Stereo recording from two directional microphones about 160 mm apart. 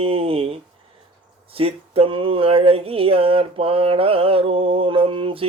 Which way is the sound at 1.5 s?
35° right (ahead or behind).